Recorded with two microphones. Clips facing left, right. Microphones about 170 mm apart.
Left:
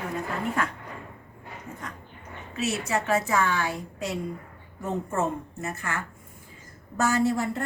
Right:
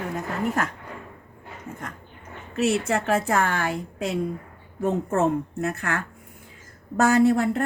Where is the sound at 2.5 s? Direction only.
55° right (ahead or behind).